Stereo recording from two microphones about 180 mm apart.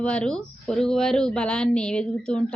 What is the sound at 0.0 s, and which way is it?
Speech, 5° left (ahead or behind).